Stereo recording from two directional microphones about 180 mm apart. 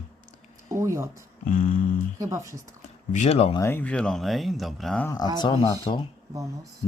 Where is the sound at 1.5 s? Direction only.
50° left (ahead or behind).